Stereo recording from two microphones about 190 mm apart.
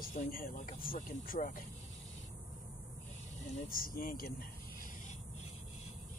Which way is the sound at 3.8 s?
50° left (ahead or behind).